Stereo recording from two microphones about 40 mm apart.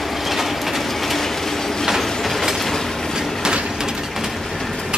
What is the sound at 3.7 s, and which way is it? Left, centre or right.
Train, centre.